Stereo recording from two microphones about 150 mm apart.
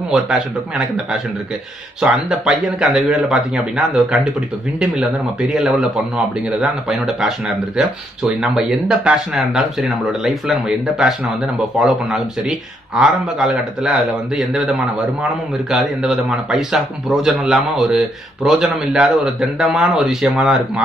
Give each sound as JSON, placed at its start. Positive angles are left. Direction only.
{"t": 0.1, "sound": "speech", "side_deg": -5}
{"t": 5.5, "sound": "speech", "side_deg": -5}